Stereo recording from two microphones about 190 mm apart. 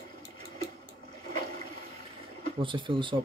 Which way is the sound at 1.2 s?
50° right (ahead or behind).